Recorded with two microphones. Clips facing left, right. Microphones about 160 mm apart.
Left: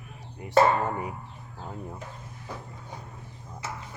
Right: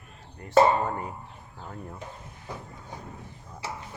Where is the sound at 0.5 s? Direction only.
20° right (ahead or behind).